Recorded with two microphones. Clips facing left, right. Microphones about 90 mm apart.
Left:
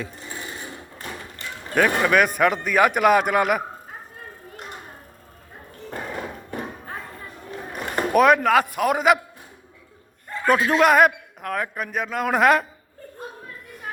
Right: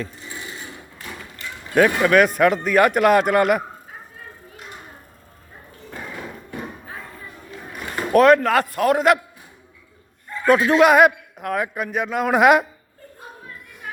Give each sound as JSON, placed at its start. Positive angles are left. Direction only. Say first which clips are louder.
{"t": 0.2, "sound": "filing", "louder": "even", "side_deg": 45}
{"t": 0.9, "sound": "a sound", "louder": "left 1 dB", "side_deg": 35}
{"t": 2.0, "sound": "a man's voice", "louder": "right 3 dB", "side_deg": 5}
{"t": 6.0, "sound": "a sound", "louder": "left 2 dB", "side_deg": 40}
{"t": 8.1, "sound": "a man's voice", "louder": "right 2 dB", "side_deg": 5}
{"t": 10.4, "sound": "a man's voice", "louder": "right 3 dB", "side_deg": 0}